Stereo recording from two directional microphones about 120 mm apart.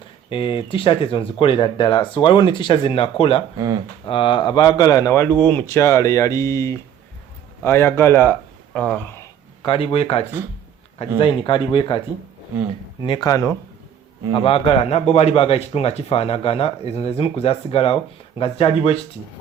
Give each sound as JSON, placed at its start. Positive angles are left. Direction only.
{"t": 0.3, "sound": "speech", "side_deg": 45}
{"t": 5.2, "sound": "a man's voice", "side_deg": 15}
{"t": 8.7, "sound": "speech", "side_deg": 5}
{"t": 9.0, "sound": "a sound", "side_deg": 20}
{"t": 9.6, "sound": "a man's voice", "side_deg": 50}
{"t": 11.2, "sound": "speech", "side_deg": 45}
{"t": 13.0, "sound": "speech", "side_deg": 40}
{"t": 14.3, "sound": "a man's voice", "side_deg": 50}